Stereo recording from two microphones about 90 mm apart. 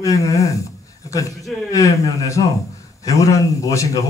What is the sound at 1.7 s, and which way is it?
A man's voice, 35° left (ahead or behind).